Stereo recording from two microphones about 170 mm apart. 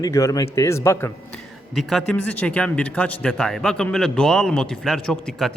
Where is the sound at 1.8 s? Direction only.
Centre (ahead or behind).